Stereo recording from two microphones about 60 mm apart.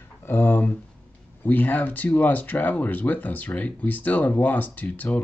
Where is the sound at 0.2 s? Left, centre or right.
Left.